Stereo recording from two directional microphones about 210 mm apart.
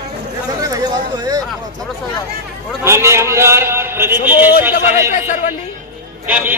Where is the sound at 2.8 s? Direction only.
10° right (ahead or behind).